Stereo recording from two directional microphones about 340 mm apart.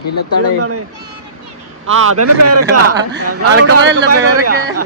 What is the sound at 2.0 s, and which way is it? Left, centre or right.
A man's voice, right.